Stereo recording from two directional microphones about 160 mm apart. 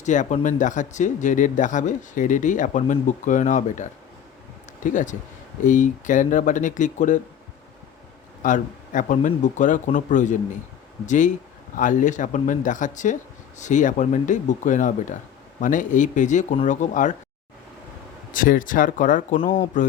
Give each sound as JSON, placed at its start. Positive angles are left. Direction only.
{"t": 0.0, "sound": "speech", "side_deg": 50}
{"t": 8.4, "sound": "speech", "side_deg": 55}
{"t": 18.3, "sound": "speech", "side_deg": 60}
{"t": 19.4, "sound": "speech", "side_deg": 35}